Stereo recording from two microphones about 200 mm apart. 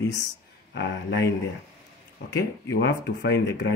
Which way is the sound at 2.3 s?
55° left (ahead or behind).